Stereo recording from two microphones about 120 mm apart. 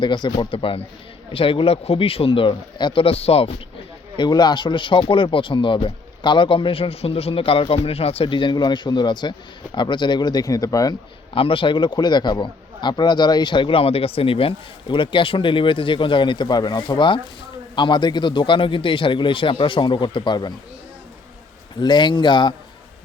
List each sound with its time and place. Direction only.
0.0 s a man's voice: 40° left (ahead or behind)
0.5 s speech: 50° left (ahead or behind)
4.2 s a man's voice: 35° left (ahead or behind)
11.3 s a man's voice: 50° left (ahead or behind)
21.8 s a man's voice: 40° left (ahead or behind)